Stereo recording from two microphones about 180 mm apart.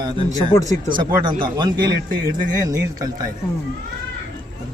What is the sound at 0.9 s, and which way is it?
A man's voice, 25° right (ahead or behind).